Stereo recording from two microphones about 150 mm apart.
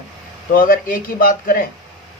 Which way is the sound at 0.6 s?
65° left (ahead or behind).